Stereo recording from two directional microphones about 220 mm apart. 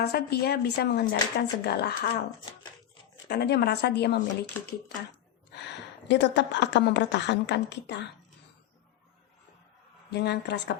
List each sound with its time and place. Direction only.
0.0 s a woman's voice: 45° left (ahead or behind)
3.2 s a woman's voice: 50° left (ahead or behind)
5.5 s a woman's voice: 50° left (ahead or behind)
10.1 s a woman's voice: 50° left (ahead or behind)